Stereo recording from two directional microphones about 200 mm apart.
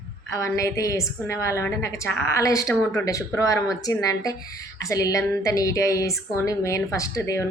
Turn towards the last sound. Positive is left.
turn(degrees=15)  # may be behind; listen again after turning